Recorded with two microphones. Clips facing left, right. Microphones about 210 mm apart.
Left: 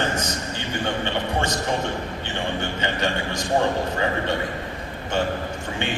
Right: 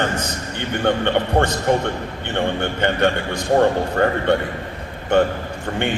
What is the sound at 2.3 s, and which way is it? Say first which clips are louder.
A man's voice: right 7 dB; 60° right (ahead or behind).